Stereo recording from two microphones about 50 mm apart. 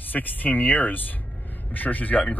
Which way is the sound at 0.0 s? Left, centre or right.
Left.